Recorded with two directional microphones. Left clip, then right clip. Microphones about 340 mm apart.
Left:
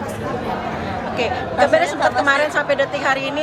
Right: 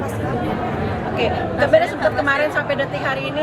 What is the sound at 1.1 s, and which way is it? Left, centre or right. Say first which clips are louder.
A woman's voice: even; centre.